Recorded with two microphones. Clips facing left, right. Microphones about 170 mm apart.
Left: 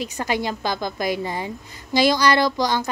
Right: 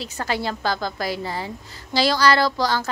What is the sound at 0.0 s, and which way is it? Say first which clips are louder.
A woman's voice: left 2 dB; 15° left (ahead or behind).